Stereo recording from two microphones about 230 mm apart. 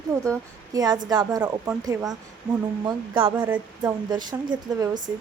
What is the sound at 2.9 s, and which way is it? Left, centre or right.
Speech, right.